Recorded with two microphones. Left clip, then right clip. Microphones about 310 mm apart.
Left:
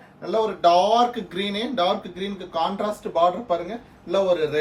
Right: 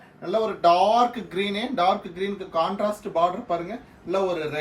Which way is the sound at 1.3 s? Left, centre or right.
Right.